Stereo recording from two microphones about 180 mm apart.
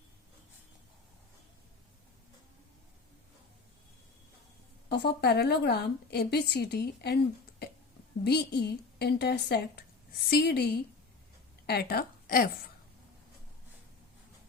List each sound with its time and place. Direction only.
4.9 s a woman's voice: 65° left (ahead or behind)
8.2 s a woman's voice: 65° left (ahead or behind)